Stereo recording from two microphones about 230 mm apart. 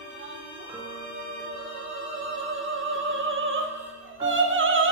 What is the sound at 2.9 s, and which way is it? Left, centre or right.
Opera, right.